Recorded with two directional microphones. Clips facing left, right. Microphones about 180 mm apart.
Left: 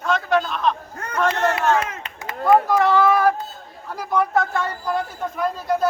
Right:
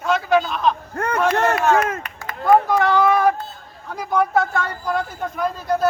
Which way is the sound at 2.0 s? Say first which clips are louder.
Even; 25° left (ahead or behind).